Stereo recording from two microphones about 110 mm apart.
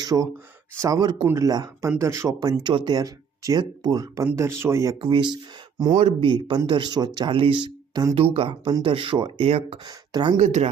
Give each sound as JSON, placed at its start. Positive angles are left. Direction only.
{"t": 0.0, "sound": "speech", "side_deg": -35}
{"t": 1.2, "sound": "speech", "side_deg": -25}
{"t": 1.5, "sound": "speech", "side_deg": -35}
{"t": 4.4, "sound": "speech", "side_deg": -25}
{"t": 4.9, "sound": "speech", "side_deg": -45}
{"t": 6.0, "sound": "speech", "side_deg": -75}
{"t": 6.2, "sound": "speech", "side_deg": -45}
{"t": 7.3, "sound": "speech", "side_deg": -50}
{"t": 8.1, "sound": "speech", "side_deg": -60}
{"t": 9.5, "sound": "speech", "side_deg": -65}
{"t": 9.8, "sound": "speech", "side_deg": -40}
{"t": 10.4, "sound": "speech", "side_deg": -90}